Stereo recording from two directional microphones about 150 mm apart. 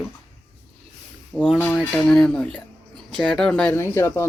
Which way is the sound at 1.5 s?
10° left (ahead or behind).